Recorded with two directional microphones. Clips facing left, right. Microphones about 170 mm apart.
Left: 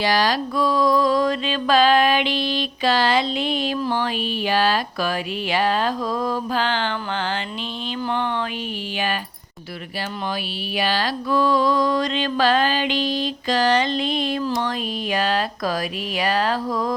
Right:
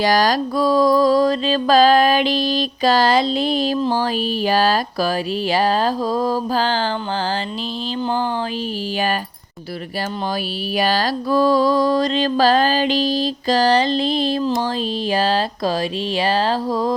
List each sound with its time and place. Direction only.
0.0 s mantra: 45° right (ahead or behind)
8.0 s mantra: 30° right (ahead or behind)
10.8 s mantra: 40° right (ahead or behind)
14.4 s a sound: 25° right (ahead or behind)